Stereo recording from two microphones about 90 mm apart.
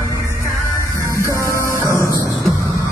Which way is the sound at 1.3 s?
35° left (ahead or behind).